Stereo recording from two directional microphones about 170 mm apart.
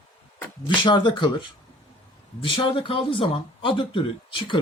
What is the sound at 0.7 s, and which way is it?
Speech, 30° left (ahead or behind).